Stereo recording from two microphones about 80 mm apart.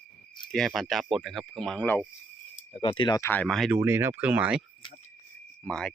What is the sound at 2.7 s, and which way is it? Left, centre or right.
Speech, left.